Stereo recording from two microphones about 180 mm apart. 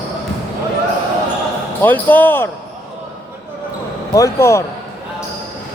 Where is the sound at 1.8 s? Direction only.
10° left (ahead or behind).